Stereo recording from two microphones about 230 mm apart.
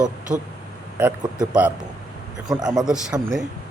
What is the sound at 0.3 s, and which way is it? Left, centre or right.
Speech, centre.